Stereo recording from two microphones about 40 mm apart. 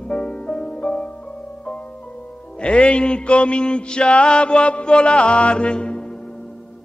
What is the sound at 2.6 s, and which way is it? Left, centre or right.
Music, left.